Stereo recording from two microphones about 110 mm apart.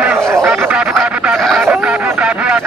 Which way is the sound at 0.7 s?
10° right (ahead or behind).